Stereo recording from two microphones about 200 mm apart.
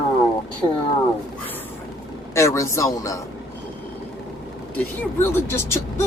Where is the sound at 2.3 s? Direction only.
15° left (ahead or behind).